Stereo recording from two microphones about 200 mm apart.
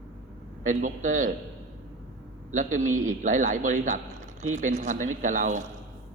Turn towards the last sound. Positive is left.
turn(degrees=-40)  # may be behind; listen again after turning